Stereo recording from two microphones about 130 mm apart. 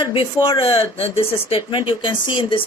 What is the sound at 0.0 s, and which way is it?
Speech, 40° left (ahead or behind).